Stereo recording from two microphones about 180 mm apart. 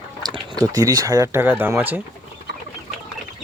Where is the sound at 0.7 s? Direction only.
20° right (ahead or behind).